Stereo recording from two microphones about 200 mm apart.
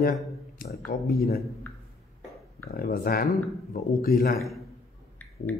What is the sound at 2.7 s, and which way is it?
Speech, 50° left (ahead or behind).